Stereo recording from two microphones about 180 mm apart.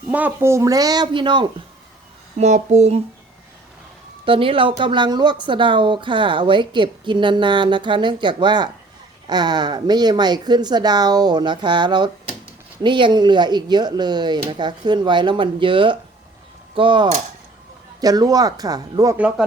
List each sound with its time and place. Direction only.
0.1 s speech: 10° right (ahead or behind); by 1.5 s 25° right (ahead or behind)
2.4 s a sound: 40° right (ahead or behind)
4.3 s speech: 30° right (ahead or behind)
19.1 s speech: 5° right (ahead or behind)